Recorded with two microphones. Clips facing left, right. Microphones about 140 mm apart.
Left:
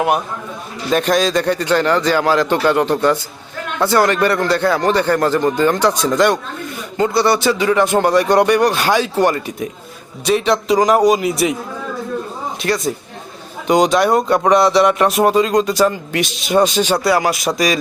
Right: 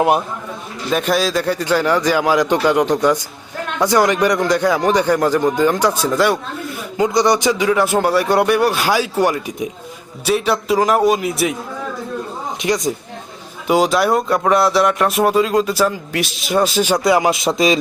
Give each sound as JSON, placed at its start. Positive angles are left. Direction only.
{"t": 0.9, "sound": "a man's voice", "side_deg": -5}
{"t": 7.7, "sound": "a man's voice", "side_deg": -5}
{"t": 12.6, "sound": "a man's voice", "side_deg": -20}
{"t": 13.7, "sound": "speech", "side_deg": -5}